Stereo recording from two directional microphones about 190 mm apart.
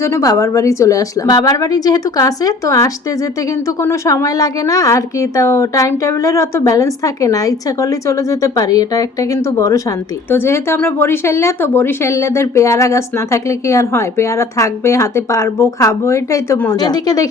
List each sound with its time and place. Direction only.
0.0 s speech: 15° left (ahead or behind)